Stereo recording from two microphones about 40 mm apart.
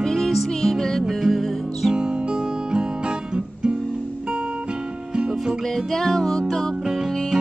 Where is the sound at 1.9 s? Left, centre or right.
Right.